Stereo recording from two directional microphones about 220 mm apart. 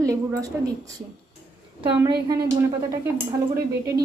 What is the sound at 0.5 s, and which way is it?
Speech, 10° right (ahead or behind).